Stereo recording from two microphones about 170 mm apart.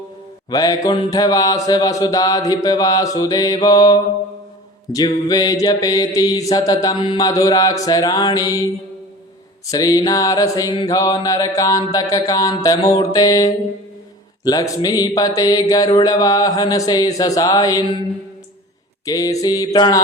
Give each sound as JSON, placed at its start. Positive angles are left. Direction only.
{"t": 0.5, "sound": "mantra", "side_deg": 20}
{"t": 9.7, "sound": "mantra", "side_deg": 20}
{"t": 19.0, "sound": "mantra", "side_deg": 20}